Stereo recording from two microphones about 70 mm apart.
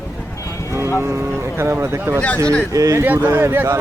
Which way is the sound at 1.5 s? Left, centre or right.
Right.